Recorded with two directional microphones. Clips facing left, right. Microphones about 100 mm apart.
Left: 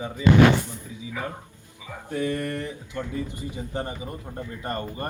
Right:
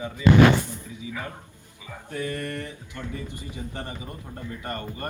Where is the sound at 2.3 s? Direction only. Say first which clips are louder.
Left 3 dB; 25° left (ahead or behind).